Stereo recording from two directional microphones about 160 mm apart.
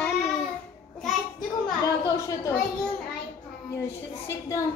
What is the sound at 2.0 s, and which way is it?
Speech, 20° left (ahead or behind).